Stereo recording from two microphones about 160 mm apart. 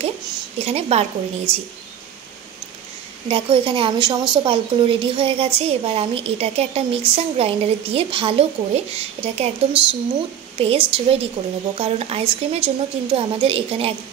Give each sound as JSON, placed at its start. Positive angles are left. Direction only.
{"t": 0.6, "sound": "a woman's voice", "side_deg": -40}
{"t": 3.3, "sound": "a woman's voice", "side_deg": -35}